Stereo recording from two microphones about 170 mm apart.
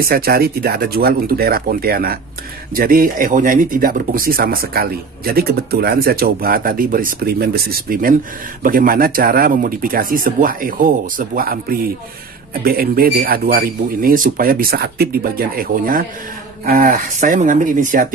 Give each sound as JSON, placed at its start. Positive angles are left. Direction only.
{"t": 0.0, "sound": "speech", "side_deg": -60}
{"t": 12.6, "sound": "speech", "side_deg": -60}